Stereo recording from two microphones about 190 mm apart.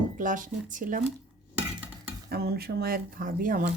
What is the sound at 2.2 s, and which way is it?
Speech, 55° right (ahead or behind).